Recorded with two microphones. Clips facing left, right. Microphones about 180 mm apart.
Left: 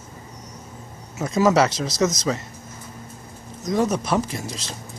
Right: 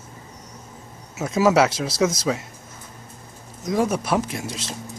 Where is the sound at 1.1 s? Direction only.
5° right (ahead or behind).